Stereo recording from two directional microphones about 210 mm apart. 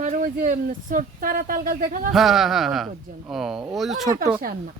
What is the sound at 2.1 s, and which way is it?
Speech, centre (ahead or behind).